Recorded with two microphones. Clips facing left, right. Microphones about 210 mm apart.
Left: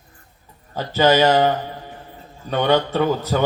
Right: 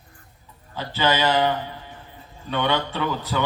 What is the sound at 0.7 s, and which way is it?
A man's voice, 45° left (ahead or behind).